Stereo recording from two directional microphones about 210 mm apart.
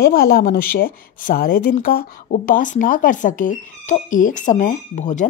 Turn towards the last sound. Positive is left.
turn(degrees=35)  # may be behind; listen again after turning